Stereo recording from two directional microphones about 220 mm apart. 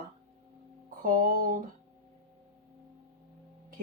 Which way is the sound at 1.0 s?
40° right (ahead or behind).